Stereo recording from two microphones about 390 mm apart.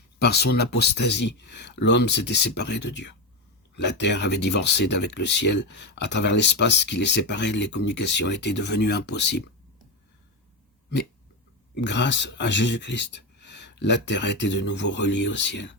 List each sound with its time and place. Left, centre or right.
0.2 s speech: left
11.8 s speech: left